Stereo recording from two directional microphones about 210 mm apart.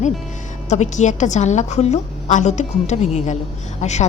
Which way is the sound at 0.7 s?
35° left (ahead or behind).